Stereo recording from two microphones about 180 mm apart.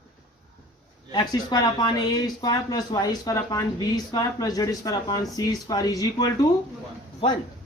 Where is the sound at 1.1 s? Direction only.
25° left (ahead or behind).